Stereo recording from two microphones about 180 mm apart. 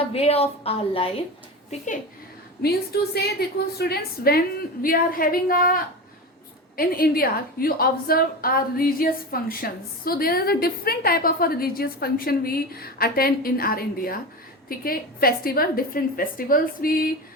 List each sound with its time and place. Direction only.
0.1 s a woman's voice: 35° left (ahead or behind)
3.2 s a woman's voice: 60° left (ahead or behind)